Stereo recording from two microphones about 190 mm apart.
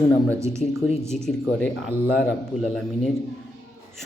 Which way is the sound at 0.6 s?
40° left (ahead or behind).